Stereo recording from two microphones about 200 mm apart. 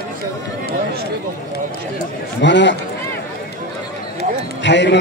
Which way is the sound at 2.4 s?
60° left (ahead or behind).